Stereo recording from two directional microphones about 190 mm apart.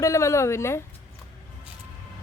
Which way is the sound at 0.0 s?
15° left (ahead or behind).